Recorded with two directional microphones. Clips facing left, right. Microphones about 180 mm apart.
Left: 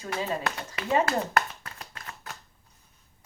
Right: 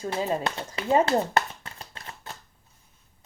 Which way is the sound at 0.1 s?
25° right (ahead or behind).